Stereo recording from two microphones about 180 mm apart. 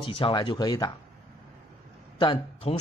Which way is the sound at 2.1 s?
25° left (ahead or behind).